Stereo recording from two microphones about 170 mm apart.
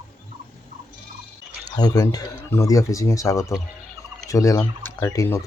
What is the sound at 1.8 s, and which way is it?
Speech, 20° left (ahead or behind).